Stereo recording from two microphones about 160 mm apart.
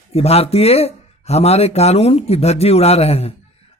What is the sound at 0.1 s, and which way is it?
A man's voice, 40° left (ahead or behind).